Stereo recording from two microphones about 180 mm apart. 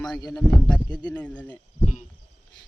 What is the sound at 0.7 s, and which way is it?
Speech, 5° left (ahead or behind).